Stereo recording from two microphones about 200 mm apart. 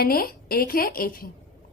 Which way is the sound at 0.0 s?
50° left (ahead or behind).